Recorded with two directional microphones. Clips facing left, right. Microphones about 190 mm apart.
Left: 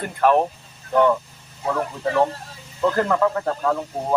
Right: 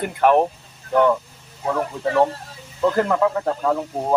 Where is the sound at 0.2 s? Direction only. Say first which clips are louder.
Right 1 dB; 15° right (ahead or behind).